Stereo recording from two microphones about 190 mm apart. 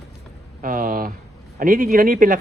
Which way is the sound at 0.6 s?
50° right (ahead or behind).